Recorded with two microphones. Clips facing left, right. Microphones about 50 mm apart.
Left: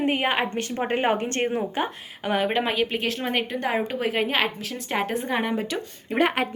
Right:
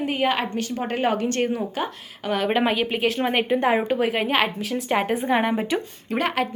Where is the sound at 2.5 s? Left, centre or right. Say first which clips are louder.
Right 2 dB; centre.